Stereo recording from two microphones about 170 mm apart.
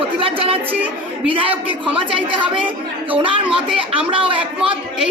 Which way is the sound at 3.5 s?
5° right (ahead or behind).